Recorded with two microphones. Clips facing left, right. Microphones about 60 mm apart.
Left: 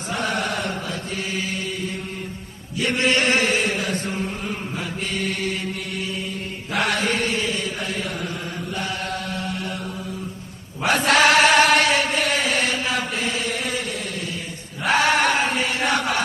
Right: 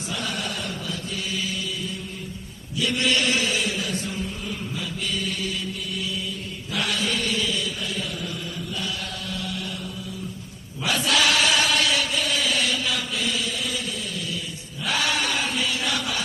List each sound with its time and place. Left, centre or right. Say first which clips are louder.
0.1 s chant: left 6 dB; left
2.8 s chant: left 3 dB; left
5.0 s mantra: left 3 dB; left
6.7 s chant: left 4 dB; left
9.3 s mantra: left 3 dB; left
10.8 s chant: left 6 dB; left
14.9 s chant: left 7 dB; left